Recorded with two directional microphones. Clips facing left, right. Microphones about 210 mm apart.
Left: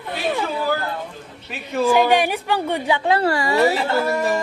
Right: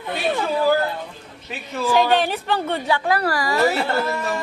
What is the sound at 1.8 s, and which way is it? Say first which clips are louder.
A woman's voice: left 2 dB; 10° left (ahead or behind).